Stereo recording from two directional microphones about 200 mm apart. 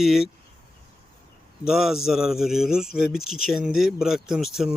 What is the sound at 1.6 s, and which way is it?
A man's voice, centre (ahead or behind).